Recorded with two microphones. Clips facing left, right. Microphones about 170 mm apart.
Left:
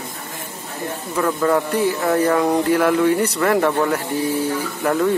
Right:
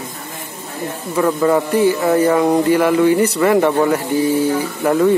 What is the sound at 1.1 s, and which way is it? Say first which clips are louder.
Speech: right 4 dB; 5° right (ahead or behind).